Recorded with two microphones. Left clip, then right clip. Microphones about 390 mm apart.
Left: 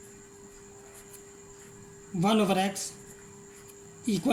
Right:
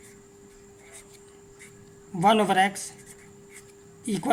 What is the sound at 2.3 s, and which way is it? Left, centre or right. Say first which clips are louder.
Speech: right 6 dB; centre.